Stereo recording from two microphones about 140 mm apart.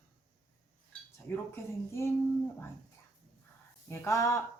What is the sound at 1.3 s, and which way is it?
Speech, 15° left (ahead or behind).